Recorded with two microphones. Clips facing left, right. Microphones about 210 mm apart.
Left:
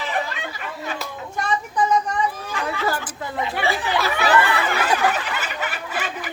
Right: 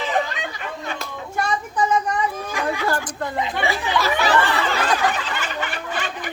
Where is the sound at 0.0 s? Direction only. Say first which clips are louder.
Right 3 dB; 20° right (ahead or behind).